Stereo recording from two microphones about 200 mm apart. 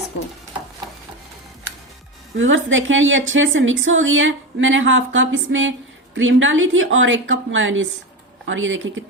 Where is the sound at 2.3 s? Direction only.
75° right (ahead or behind).